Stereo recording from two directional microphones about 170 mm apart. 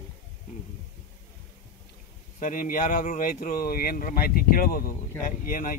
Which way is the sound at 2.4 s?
50° left (ahead or behind).